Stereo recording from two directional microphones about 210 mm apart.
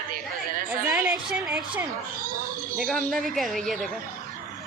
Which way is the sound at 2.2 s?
40° right (ahead or behind).